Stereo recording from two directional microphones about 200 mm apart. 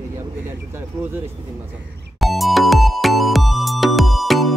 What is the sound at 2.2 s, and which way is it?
Music, centre (ahead or behind).